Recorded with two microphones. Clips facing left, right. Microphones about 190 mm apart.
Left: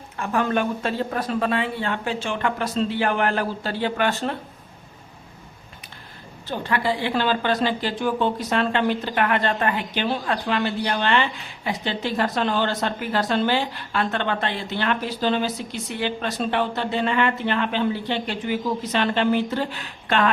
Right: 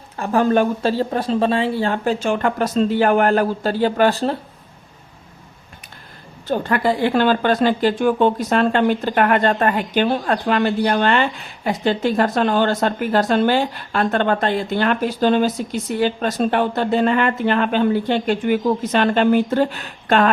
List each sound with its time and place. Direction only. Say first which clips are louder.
0.2 s speech: right 6 dB; 35° right (ahead or behind)
6.5 s a woman's voice: right 6 dB; 50° right (ahead or behind)